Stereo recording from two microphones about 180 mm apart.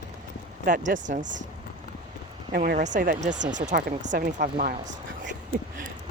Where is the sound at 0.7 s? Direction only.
45° right (ahead or behind).